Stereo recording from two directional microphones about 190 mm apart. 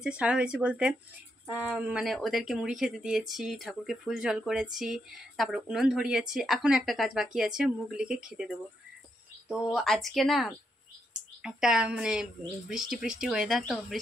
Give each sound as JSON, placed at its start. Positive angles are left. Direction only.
{"t": 0.0, "sound": "speech", "side_deg": -5}